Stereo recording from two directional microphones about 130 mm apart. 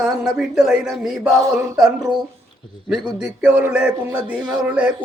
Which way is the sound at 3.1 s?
10° right (ahead or behind).